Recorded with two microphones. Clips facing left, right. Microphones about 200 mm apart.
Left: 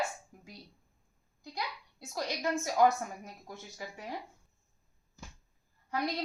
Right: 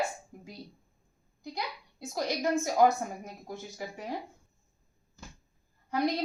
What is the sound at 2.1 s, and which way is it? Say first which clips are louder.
A woman's voice: right 4 dB; 15° right (ahead or behind).